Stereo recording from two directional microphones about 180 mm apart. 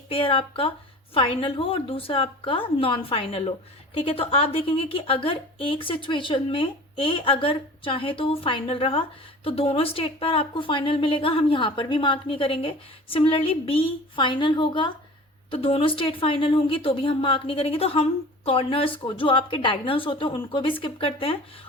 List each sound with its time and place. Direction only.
0.1 s a woman's voice: 30° left (ahead or behind)